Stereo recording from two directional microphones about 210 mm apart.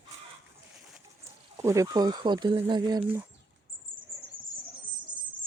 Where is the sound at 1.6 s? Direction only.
15° right (ahead or behind).